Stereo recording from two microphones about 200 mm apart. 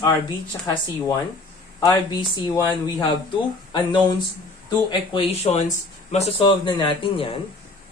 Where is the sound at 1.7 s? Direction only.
20° left (ahead or behind).